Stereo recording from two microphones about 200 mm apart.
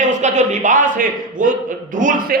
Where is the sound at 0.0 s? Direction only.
35° right (ahead or behind).